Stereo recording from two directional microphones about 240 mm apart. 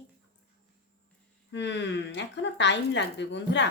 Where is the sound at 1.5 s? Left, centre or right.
Left.